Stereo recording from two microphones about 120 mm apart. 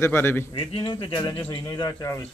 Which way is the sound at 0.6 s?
45° left (ahead or behind).